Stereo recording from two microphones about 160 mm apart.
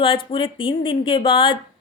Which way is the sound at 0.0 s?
35° left (ahead or behind).